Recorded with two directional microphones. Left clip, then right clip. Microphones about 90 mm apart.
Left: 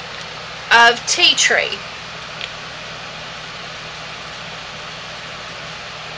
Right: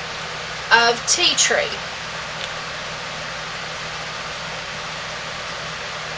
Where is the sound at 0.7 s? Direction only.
30° left (ahead or behind).